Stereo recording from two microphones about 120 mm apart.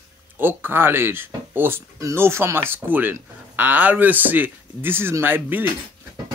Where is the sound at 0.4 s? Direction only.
15° right (ahead or behind).